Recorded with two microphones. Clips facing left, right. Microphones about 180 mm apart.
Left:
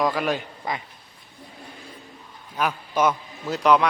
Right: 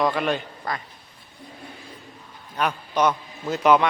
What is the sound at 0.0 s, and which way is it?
Speech, 5° left (ahead or behind).